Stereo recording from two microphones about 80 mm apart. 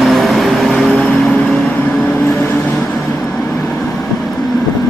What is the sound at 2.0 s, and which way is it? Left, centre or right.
Vehicle, left.